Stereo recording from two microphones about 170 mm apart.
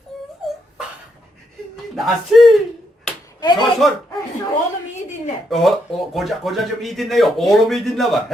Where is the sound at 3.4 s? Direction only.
25° left (ahead or behind).